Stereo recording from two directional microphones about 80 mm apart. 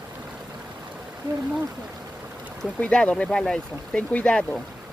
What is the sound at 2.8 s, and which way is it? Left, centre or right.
Speech, centre.